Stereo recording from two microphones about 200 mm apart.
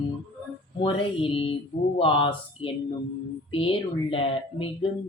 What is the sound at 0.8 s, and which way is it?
Speech, 25° left (ahead or behind).